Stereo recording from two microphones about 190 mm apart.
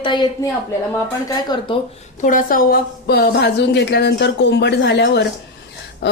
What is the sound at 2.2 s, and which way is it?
A woman's voice, 45° left (ahead or behind).